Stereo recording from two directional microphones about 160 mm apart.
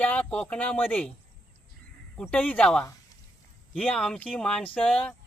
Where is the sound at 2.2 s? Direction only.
10° left (ahead or behind).